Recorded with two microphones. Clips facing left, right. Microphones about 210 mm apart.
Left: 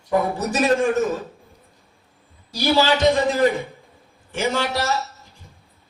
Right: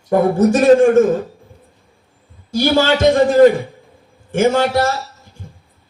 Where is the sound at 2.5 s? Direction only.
50° right (ahead or behind).